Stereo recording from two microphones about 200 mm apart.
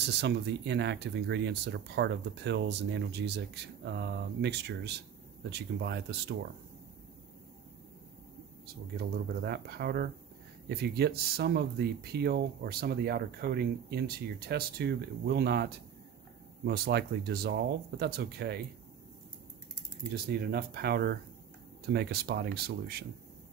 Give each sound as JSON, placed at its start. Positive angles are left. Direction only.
{"t": 0.0, "sound": "speech", "side_deg": -60}
{"t": 8.6, "sound": "speech", "side_deg": -55}
{"t": 20.1, "sound": "speech", "side_deg": -50}